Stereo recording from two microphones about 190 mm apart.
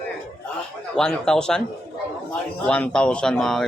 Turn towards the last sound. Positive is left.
turn(degrees=0)  # may be behind; listen again after turning